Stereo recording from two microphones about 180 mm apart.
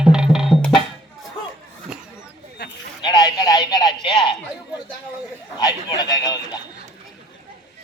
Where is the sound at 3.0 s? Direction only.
25° left (ahead or behind).